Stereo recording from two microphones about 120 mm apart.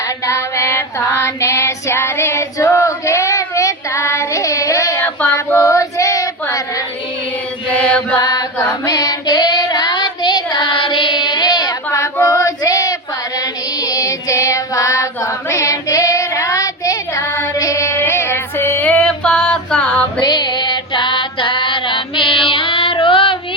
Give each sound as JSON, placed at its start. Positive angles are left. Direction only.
{"t": 0.3, "sound": "female singing", "side_deg": 25}
{"t": 7.7, "sound": "chant", "side_deg": 10}
{"t": 8.2, "sound": "a sound", "side_deg": 35}
{"t": 8.9, "sound": "child singing", "side_deg": 30}
{"t": 11.9, "sound": "female singing", "side_deg": 20}
{"t": 13.8, "sound": "child singing", "side_deg": 30}
{"t": 20.2, "sound": "music", "side_deg": 40}